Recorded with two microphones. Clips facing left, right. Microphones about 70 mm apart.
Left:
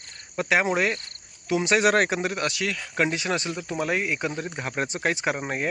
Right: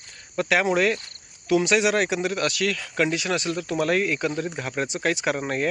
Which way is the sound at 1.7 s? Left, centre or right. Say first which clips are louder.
Left 1 dB; left.